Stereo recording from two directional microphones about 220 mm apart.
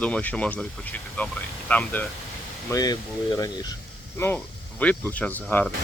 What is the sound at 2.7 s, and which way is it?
Speech, 15° left (ahead or behind).